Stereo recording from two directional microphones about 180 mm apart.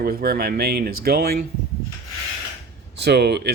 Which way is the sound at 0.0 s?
55° right (ahead or behind).